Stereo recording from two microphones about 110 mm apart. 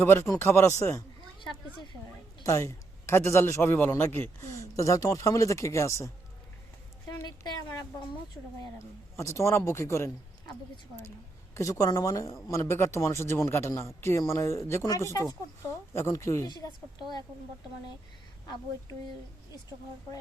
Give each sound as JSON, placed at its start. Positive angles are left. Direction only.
{"t": 0.0, "sound": "a man's voice", "side_deg": 20}
{"t": 2.4, "sound": "a man's voice", "side_deg": 30}
{"t": 7.3, "sound": "speech", "side_deg": 40}
{"t": 8.4, "sound": "speech", "side_deg": 5}
{"t": 9.1, "sound": "a man's voice", "side_deg": 25}
{"t": 11.5, "sound": "a woman's voice", "side_deg": 30}